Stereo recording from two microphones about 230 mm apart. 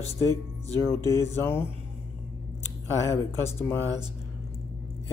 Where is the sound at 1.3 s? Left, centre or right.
Centre.